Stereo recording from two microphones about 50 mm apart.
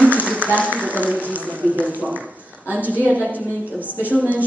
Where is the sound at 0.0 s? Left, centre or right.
Right.